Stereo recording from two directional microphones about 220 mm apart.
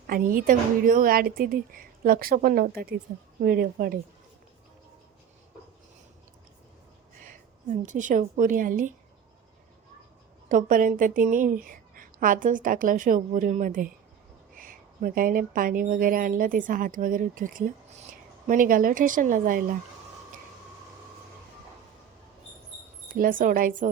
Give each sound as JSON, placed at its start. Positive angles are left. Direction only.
{"t": 0.1, "sound": "speech", "side_deg": -40}
{"t": 7.3, "sound": "a woman's voice", "side_deg": -35}
{"t": 10.5, "sound": "speech", "side_deg": -35}
{"t": 23.1, "sound": "speech", "side_deg": -40}